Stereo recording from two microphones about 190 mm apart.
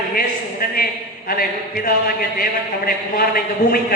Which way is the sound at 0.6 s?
50° left (ahead or behind).